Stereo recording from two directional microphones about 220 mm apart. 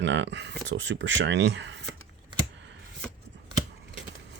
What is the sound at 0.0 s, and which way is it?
Speech, 55° right (ahead or behind).